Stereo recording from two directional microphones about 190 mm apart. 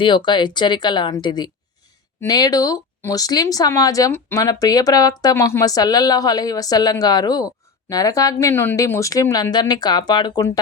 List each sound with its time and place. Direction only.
0.0 s speech: 25° left (ahead or behind)